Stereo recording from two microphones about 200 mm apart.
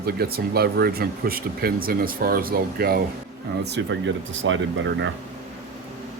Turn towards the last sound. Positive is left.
turn(degrees=-70)  # may be behind; listen again after turning